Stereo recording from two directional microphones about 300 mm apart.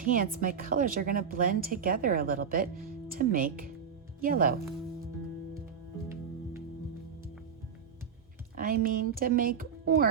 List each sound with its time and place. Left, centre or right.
0.0 s a woman's voice: right
8.5 s speech: right